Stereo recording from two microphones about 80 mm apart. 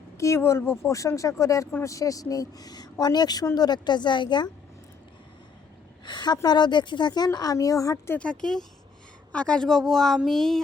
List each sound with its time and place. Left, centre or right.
0.2 s a woman's voice: left
6.1 s a woman's voice: left
7.3 s a woman's voice: left
8.1 s speech: centre